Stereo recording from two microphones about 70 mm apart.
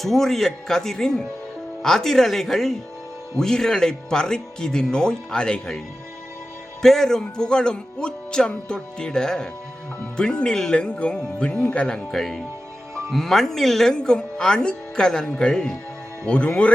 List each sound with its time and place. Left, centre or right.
0.0 s speech: centre
6.8 s speech: centre
12.2 s speech: centre